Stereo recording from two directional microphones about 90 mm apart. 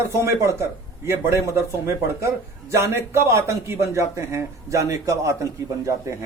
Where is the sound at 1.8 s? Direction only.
30° right (ahead or behind).